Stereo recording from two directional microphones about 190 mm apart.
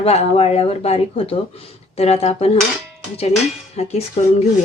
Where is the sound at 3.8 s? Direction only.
35° left (ahead or behind).